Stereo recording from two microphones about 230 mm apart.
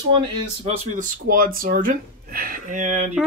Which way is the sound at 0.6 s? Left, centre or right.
Right.